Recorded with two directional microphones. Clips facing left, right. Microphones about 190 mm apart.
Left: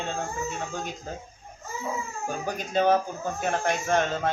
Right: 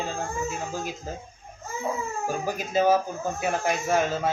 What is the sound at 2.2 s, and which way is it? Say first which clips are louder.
Speech: right 2 dB; 5° right (ahead or behind).